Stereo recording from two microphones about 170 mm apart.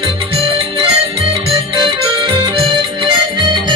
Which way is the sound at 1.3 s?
30° right (ahead or behind).